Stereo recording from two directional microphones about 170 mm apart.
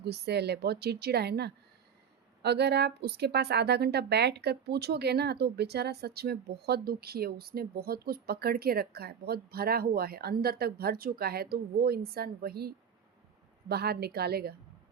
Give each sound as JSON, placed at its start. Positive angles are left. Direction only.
{"t": 0.0, "sound": "a woman's voice", "side_deg": -75}